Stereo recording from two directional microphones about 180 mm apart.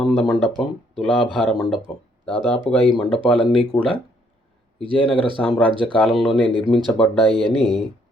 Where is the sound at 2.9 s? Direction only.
5° left (ahead or behind).